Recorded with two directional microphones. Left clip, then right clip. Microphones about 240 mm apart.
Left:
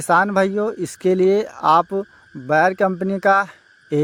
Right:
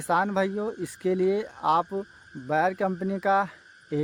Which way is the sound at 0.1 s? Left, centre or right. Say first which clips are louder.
Left 9 dB; left.